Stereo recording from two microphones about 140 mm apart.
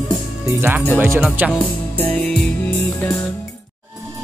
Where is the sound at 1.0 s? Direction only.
10° right (ahead or behind).